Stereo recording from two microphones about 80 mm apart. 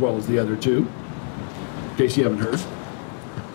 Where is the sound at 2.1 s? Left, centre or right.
Left.